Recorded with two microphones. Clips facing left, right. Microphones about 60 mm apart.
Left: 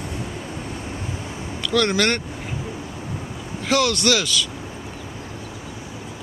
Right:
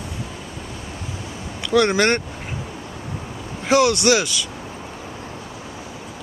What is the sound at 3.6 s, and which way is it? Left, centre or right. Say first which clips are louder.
Speech: right 4 dB; centre.